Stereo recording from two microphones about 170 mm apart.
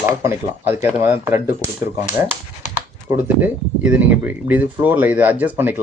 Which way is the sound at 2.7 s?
10° right (ahead or behind).